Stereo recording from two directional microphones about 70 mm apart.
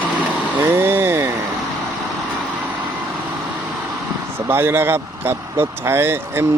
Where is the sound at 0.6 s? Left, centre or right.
Right.